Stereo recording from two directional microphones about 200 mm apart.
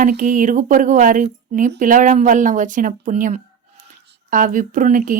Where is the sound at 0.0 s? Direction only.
40° right (ahead or behind).